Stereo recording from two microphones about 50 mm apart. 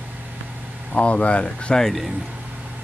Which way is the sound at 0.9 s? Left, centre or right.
Left.